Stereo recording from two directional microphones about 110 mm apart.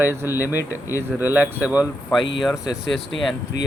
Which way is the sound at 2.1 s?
Centre (ahead or behind).